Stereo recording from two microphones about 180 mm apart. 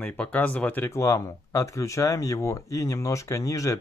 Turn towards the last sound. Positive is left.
turn(degrees=15)  # may be behind; listen again after turning